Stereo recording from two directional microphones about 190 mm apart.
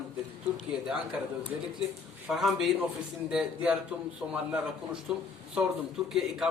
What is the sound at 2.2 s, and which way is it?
A man's voice, centre (ahead or behind).